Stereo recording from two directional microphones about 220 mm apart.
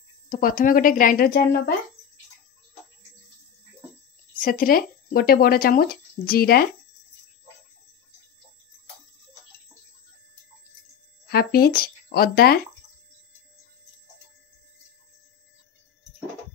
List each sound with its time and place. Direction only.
0.3 s speech: 40° left (ahead or behind)
4.4 s speech: 40° left (ahead or behind)
11.2 s speech: 45° left (ahead or behind)